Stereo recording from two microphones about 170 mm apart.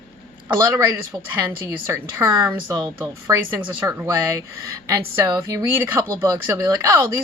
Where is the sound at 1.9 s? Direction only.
15° right (ahead or behind).